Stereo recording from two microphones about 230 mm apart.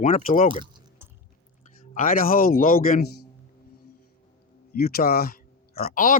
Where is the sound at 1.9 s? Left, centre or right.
Left.